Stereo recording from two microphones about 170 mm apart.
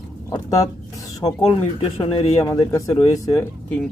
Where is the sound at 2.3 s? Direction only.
20° left (ahead or behind).